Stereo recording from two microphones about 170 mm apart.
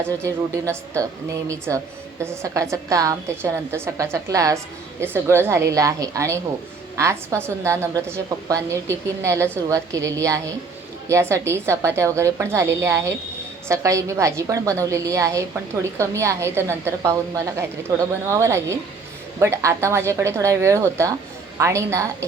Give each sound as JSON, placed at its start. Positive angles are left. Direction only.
{"t": 0.0, "sound": "a woman's voice", "side_deg": -15}